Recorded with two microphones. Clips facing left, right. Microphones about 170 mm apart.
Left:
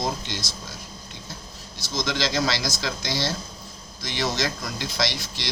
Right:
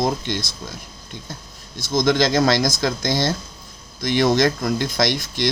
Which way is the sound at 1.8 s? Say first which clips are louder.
Right 9 dB; 50° right (ahead or behind).